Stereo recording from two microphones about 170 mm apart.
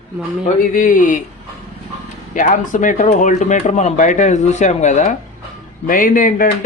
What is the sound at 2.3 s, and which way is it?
Speech, 50° left (ahead or behind).